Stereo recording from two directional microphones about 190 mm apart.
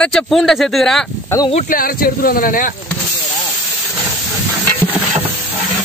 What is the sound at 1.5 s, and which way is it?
Speech, 50° left (ahead or behind).